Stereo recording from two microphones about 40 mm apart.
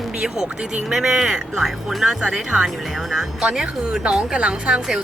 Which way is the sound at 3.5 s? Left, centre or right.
Right.